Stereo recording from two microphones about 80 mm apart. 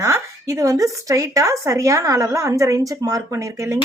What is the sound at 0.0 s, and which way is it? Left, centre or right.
Speech, right.